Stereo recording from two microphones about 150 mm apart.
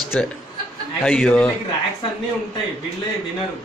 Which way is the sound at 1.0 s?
10° left (ahead or behind).